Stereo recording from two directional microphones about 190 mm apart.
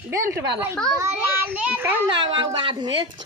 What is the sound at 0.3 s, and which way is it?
A child's voice, 15° right (ahead or behind).